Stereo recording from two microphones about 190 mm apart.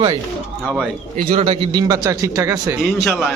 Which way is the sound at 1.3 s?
30° right (ahead or behind).